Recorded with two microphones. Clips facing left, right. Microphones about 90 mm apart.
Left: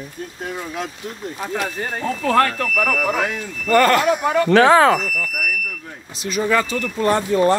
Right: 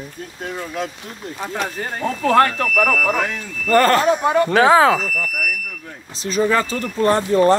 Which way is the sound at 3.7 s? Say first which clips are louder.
Right 1 dB; 35° right (ahead or behind).